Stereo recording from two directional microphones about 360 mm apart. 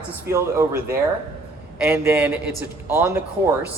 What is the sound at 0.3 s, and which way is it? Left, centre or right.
Speech, centre.